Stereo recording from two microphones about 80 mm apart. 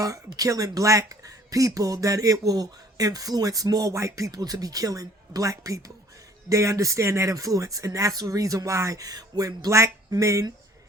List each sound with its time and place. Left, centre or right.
0.3 s speech: right
9.7 s speech: right